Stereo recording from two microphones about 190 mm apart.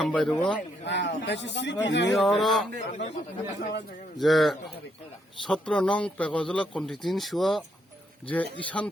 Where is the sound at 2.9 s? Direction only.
40° left (ahead or behind).